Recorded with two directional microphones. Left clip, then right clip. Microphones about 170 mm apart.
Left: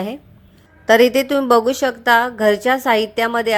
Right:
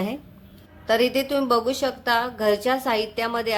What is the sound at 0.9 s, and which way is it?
Speech, 40° left (ahead or behind).